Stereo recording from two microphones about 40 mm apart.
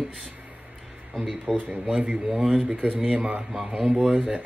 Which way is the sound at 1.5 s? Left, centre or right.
Centre.